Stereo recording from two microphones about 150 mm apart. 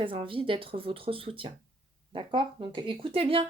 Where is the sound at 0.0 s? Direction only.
35° right (ahead or behind).